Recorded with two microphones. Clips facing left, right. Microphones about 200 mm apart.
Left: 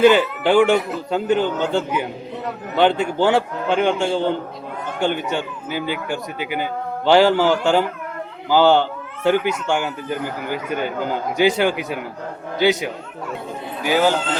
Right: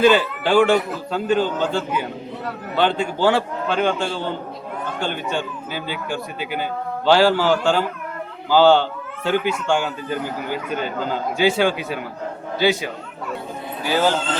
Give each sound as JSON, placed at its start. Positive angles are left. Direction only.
{"t": 0.0, "sound": "speech", "side_deg": 15}
{"t": 13.8, "sound": "speech", "side_deg": 10}